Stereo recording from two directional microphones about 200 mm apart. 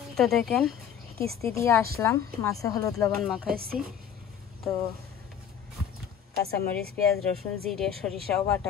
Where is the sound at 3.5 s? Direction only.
50° right (ahead or behind).